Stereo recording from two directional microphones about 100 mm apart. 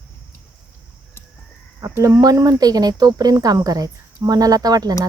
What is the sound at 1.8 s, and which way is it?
A woman's voice, 30° right (ahead or behind).